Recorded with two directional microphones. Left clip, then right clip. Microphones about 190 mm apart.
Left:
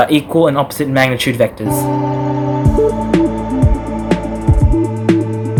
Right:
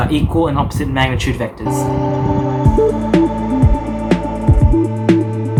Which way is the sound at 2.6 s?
Centre (ahead or behind).